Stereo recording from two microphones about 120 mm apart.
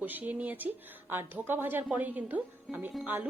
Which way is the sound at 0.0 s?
15° right (ahead or behind).